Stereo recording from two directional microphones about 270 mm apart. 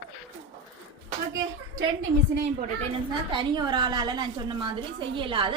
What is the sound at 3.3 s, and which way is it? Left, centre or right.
A woman's voice, centre.